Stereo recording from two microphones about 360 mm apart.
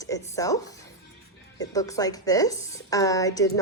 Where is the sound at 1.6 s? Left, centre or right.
Centre.